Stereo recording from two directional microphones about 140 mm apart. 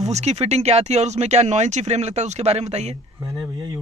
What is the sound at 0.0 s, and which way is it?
Speech, 50° right (ahead or behind).